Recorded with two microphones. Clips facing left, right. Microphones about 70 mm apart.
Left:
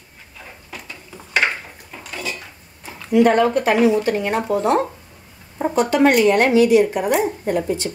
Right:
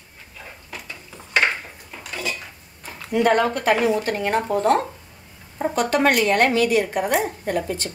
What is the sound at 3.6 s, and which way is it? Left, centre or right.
Speech, right.